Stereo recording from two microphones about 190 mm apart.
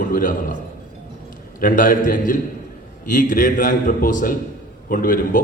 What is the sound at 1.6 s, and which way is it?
A man's voice, 45° left (ahead or behind).